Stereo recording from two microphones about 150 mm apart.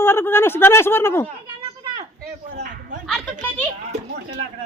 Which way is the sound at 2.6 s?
60° right (ahead or behind).